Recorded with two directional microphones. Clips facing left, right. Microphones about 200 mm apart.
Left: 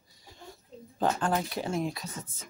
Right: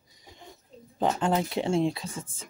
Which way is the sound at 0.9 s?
25° right (ahead or behind).